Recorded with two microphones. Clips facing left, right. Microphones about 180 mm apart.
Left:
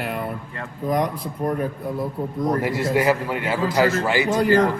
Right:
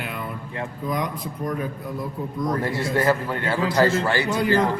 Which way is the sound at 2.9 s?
10° left (ahead or behind).